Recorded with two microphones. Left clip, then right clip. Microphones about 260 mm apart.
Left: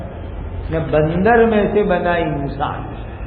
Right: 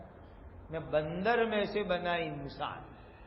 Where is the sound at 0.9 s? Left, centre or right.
Right.